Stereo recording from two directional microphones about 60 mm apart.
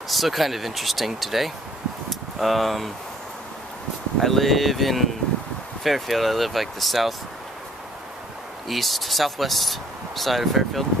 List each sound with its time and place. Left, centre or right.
0.1 s speech: centre
2.0 s a sound: centre
4.2 s speech: centre
8.6 s speech: centre